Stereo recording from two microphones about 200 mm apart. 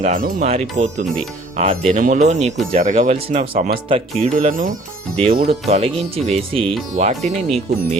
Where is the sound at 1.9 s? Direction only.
40° right (ahead or behind).